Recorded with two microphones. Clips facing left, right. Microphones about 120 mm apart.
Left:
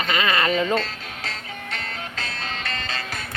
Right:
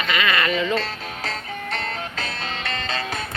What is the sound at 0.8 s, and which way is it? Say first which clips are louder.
Music: right 4 dB; 35° right (ahead or behind).